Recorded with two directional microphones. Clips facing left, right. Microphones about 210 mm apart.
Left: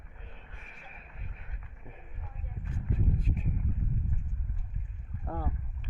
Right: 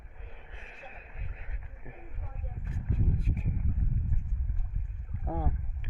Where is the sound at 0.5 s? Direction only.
30° right (ahead or behind).